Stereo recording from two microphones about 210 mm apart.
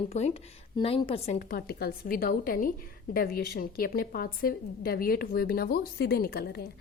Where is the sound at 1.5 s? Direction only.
45° left (ahead or behind).